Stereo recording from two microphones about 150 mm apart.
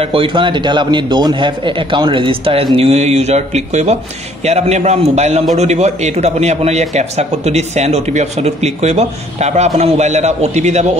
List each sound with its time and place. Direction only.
0.0 s a man's voice: 35° right (ahead or behind)